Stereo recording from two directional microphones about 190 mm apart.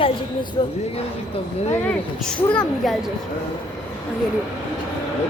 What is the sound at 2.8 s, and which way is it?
Speech, centre (ahead or behind).